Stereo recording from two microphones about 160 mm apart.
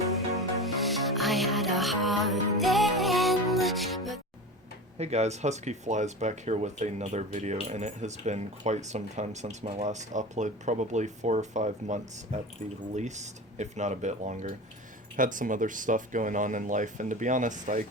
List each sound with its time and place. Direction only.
0.6 s music: centre (ahead or behind)
4.9 s speech: 45° right (ahead or behind)